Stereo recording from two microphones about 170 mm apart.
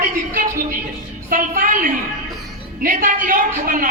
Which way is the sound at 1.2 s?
55° right (ahead or behind).